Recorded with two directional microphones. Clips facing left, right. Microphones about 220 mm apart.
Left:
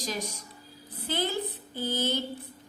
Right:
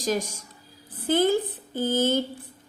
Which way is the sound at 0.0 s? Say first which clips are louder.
Right 8 dB; 50° right (ahead or behind).